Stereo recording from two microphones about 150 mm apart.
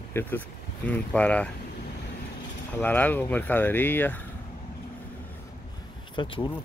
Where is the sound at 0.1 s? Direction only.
10° left (ahead or behind).